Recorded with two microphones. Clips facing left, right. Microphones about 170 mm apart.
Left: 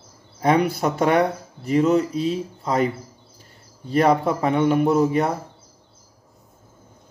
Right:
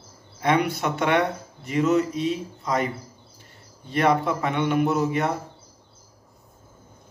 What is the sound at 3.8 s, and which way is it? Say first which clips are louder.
Speech: left 3 dB; 35° left (ahead or behind).